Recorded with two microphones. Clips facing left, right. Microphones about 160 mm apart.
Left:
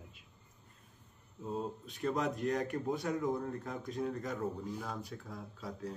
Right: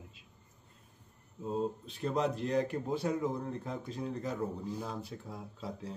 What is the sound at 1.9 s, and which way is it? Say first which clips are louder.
Speech: left 1 dB; 30° right (ahead or behind).